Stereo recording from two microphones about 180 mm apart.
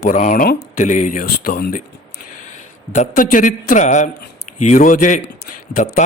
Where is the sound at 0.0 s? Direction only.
45° left (ahead or behind).